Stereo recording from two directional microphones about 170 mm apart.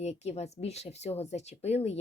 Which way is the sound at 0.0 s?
40° left (ahead or behind).